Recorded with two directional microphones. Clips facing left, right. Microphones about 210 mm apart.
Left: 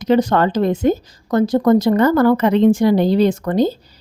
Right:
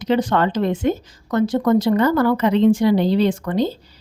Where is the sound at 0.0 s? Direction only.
40° left (ahead or behind).